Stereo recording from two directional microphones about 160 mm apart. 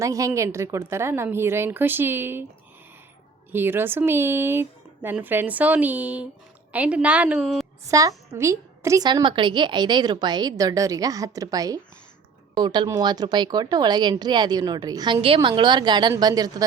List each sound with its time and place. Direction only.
0.0 s a woman's voice: 20° right (ahead or behind)
3.5 s a woman's voice: 15° right (ahead or behind)
7.9 s a woman's voice: 20° right (ahead or behind)